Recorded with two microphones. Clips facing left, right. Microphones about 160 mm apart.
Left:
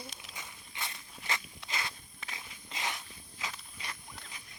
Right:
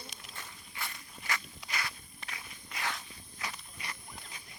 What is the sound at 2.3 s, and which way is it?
Walk, 20° left (ahead or behind).